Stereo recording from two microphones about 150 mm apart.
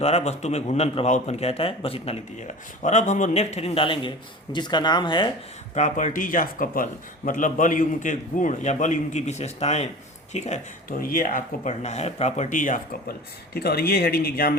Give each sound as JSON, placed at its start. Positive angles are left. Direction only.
{"t": 0.0, "sound": "a man's voice", "side_deg": 45}
{"t": 2.8, "sound": "a man's voice", "side_deg": 55}
{"t": 5.7, "sound": "speech", "side_deg": 55}